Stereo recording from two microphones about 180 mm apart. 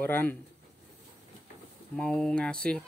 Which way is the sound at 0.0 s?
10° left (ahead or behind).